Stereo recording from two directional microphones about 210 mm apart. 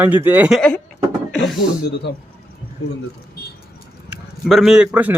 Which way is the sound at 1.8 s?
55° left (ahead or behind).